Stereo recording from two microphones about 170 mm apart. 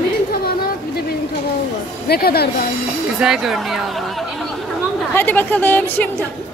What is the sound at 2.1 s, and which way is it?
Speech, 65° left (ahead or behind).